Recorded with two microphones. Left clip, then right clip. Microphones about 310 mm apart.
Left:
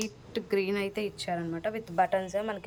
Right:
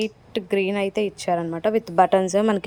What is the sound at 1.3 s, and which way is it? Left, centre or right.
Speech, right.